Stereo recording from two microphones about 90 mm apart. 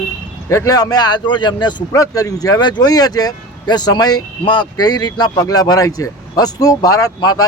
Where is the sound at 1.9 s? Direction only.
40° left (ahead or behind).